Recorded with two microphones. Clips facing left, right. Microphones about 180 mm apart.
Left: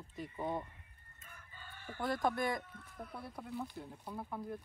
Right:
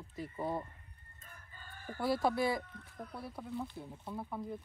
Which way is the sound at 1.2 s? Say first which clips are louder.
Even; 35° right (ahead or behind).